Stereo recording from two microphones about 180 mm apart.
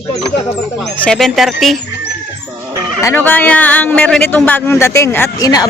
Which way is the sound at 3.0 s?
10° left (ahead or behind).